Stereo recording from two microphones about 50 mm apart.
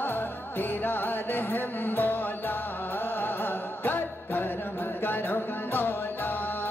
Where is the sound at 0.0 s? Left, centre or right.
Left.